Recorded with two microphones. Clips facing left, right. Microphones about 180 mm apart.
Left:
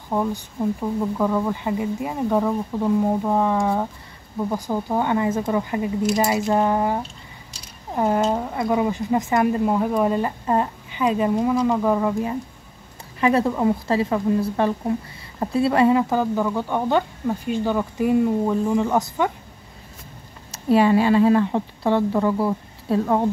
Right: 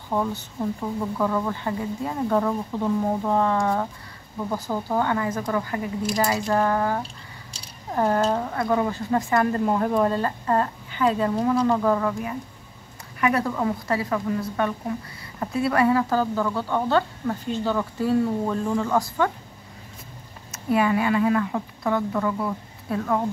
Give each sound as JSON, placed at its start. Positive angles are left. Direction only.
{"t": 0.1, "sound": "speech", "side_deg": 10}
{"t": 9.7, "sound": "speech", "side_deg": 5}
{"t": 20.5, "sound": "speech", "side_deg": 30}